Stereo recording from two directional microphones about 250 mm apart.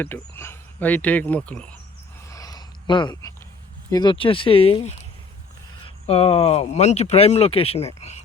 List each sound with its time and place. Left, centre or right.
0.0 s speech: centre
2.3 s a sound: centre
3.9 s speech: centre